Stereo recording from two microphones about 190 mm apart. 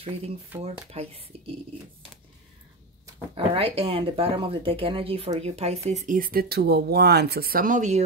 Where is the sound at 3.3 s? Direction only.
30° right (ahead or behind).